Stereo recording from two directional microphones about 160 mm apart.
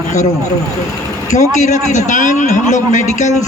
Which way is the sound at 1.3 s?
50° left (ahead or behind).